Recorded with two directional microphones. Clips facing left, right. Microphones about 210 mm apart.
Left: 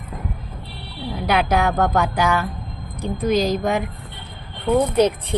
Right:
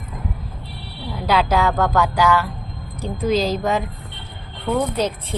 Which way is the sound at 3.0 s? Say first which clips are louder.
Even; 15° left (ahead or behind).